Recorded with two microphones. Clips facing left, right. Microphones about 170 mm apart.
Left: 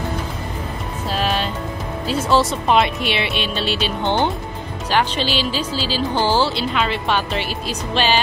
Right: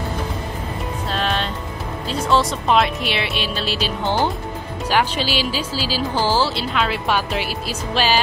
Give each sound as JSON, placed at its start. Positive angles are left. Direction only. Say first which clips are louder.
{"t": 1.1, "sound": "music", "louder": "left 2 dB", "side_deg": 5}
{"t": 2.0, "sound": "speech", "louder": "left 1 dB", "side_deg": 5}